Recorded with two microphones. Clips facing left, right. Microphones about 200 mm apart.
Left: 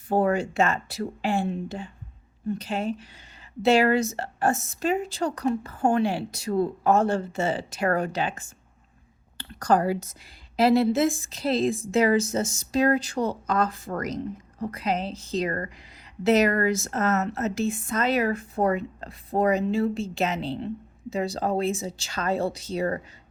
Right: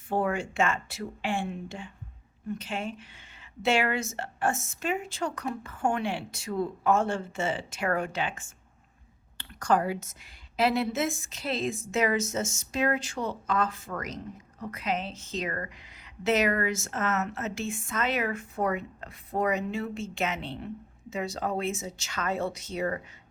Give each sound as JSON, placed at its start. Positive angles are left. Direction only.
{"t": 0.1, "sound": "a woman's voice", "side_deg": 40}